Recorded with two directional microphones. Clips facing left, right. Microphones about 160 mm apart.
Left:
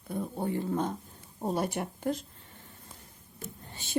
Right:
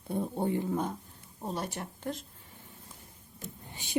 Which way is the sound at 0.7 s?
5° right (ahead or behind).